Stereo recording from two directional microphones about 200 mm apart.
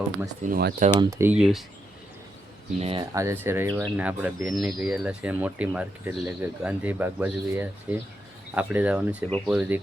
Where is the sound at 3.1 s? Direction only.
15° right (ahead or behind).